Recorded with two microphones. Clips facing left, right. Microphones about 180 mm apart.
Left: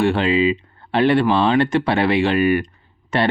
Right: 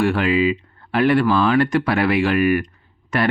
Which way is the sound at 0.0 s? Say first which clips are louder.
Left 1 dB; 25° left (ahead or behind).